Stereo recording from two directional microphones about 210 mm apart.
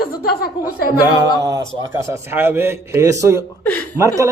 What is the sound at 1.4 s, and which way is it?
A man's voice, 15° right (ahead or behind).